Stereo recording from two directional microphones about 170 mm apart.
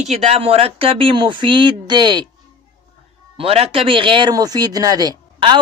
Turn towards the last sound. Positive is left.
turn(degrees=-25)  # may be behind; listen again after turning